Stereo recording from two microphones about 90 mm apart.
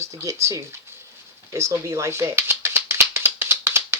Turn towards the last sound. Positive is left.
turn(degrees=-25)  # may be behind; listen again after turning